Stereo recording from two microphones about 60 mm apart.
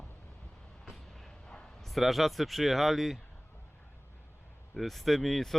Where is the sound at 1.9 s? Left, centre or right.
Centre.